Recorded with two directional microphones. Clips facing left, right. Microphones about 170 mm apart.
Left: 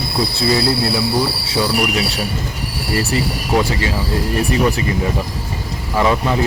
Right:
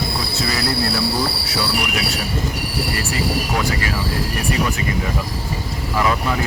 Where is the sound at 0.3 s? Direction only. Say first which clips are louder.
Left 8 dB; 25° left (ahead or behind).